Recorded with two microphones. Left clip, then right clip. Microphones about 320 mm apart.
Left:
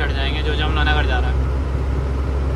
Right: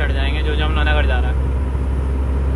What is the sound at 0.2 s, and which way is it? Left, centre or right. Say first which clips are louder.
Vehicle: even; centre.